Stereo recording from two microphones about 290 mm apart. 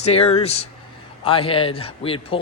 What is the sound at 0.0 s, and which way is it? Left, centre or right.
A man's voice, left.